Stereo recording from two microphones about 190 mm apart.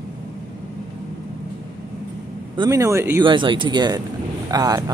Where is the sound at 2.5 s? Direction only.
15° right (ahead or behind).